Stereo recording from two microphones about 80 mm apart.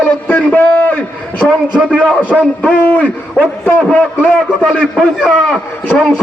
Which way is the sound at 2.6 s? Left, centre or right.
Centre.